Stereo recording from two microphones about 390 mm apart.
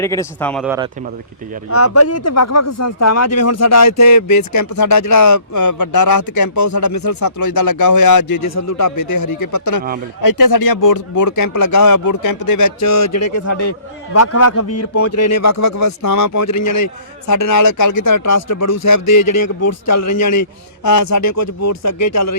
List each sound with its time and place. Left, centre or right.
0.0 s speech: centre
1.7 s speech: left